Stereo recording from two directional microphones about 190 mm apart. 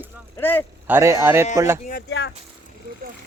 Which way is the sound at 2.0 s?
70° left (ahead or behind).